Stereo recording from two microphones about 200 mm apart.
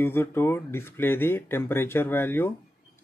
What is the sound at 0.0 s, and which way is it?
Speech, 10° left (ahead or behind).